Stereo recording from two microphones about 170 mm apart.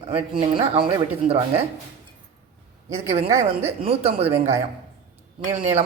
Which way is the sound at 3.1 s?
35° right (ahead or behind).